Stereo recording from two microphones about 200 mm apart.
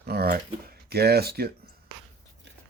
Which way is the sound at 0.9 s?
50° right (ahead or behind).